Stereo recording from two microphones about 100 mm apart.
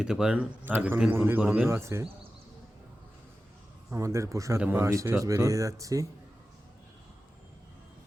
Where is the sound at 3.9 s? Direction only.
30° right (ahead or behind).